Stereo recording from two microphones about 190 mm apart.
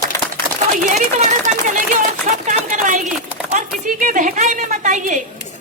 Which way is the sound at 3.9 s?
45° right (ahead or behind).